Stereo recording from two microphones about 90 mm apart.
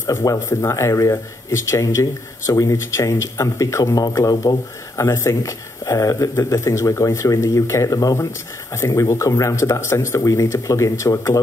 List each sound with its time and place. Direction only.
0.0 s speech: 40° left (ahead or behind)